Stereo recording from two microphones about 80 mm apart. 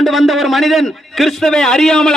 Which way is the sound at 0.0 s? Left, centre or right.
Centre.